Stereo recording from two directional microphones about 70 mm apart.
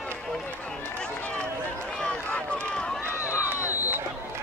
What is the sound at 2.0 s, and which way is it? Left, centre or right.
Run, centre.